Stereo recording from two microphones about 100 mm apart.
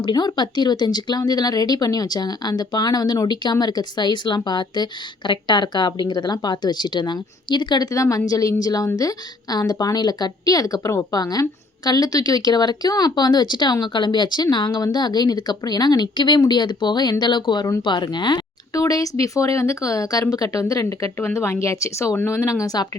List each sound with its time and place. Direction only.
0.0 s a woman's voice: 45° left (ahead or behind)